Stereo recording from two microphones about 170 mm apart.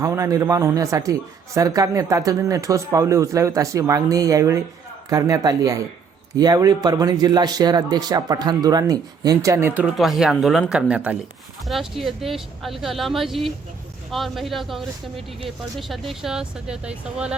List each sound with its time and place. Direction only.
0.0 s a man's voice: 20° right (ahead or behind)